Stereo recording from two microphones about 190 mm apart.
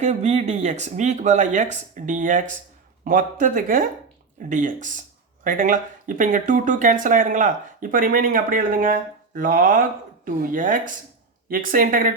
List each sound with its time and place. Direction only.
0.0 s speech: 35° right (ahead or behind)